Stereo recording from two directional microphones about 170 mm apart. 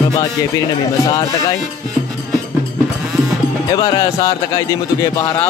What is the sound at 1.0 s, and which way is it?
Speech, 20° left (ahead or behind).